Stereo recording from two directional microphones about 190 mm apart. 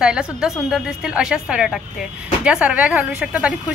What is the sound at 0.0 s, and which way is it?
A woman's voice, 5° right (ahead or behind).